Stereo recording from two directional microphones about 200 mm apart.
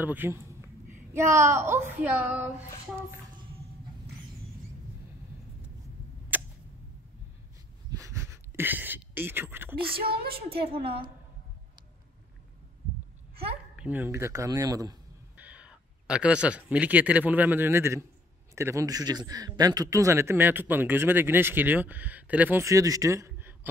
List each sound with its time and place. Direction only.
0.0 s a man's voice: 10° right (ahead or behind)
6.3 s a sound: 10° right (ahead or behind)
8.0 s a sound: 15° right (ahead or behind)
10.2 s a woman's voice: 25° right (ahead or behind)
13.7 s speech: 10° right (ahead or behind)
15.4 s a man's voice: 5° right (ahead or behind)